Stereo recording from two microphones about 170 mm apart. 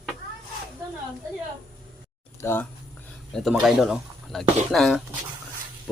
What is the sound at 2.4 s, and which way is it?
Speech, 15° left (ahead or behind).